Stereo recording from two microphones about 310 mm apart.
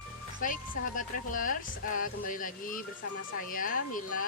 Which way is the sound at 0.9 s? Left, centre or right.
Left.